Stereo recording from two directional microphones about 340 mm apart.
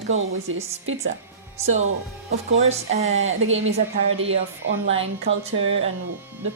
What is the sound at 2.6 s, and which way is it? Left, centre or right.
Speech, centre.